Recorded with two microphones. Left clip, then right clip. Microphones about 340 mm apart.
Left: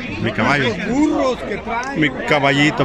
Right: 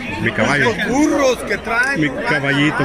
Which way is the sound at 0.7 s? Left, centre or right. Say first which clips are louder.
Right 2 dB; right.